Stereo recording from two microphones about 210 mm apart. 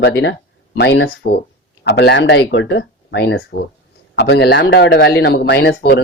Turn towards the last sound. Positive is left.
turn(degrees=55)  # may be behind; listen again after turning